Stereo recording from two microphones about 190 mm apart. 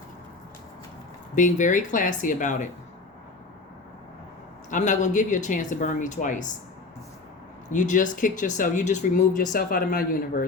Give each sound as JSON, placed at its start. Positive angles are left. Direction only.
{"t": 1.4, "sound": "speech", "side_deg": 40}
{"t": 4.7, "sound": "speech", "side_deg": 40}
{"t": 7.7, "sound": "speech", "side_deg": 40}